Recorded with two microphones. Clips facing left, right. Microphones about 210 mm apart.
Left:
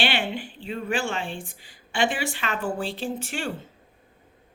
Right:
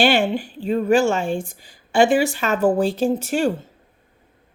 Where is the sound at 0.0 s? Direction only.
45° right (ahead or behind).